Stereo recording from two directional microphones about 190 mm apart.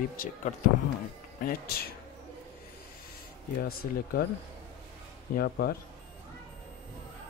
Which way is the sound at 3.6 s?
50° left (ahead or behind).